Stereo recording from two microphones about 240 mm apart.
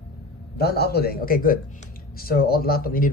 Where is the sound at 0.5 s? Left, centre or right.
Left.